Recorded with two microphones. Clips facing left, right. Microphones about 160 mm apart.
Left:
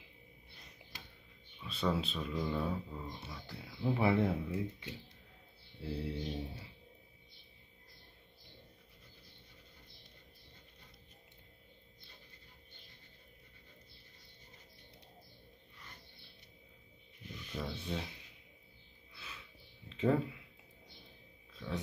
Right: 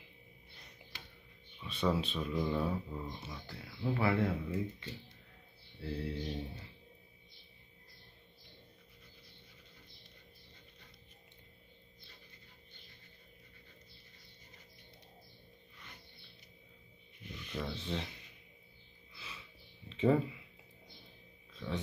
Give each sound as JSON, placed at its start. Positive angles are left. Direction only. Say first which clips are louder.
{"t": 1.6, "sound": "speech", "louder": "right 2 dB", "side_deg": 0}
{"t": 3.4, "sound": "mantra", "louder": "left 2 dB", "side_deg": 10}
{"t": 17.3, "sound": "speech", "louder": "right 1 dB", "side_deg": 5}
{"t": 19.1, "sound": "music", "louder": "right 1 dB", "side_deg": 0}
{"t": 19.9, "sound": "speech", "louder": "right 2 dB", "side_deg": 0}